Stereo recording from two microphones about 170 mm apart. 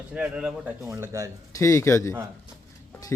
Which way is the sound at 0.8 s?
20° right (ahead or behind).